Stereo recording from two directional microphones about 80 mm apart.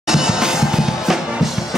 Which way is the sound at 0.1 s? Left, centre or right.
Centre.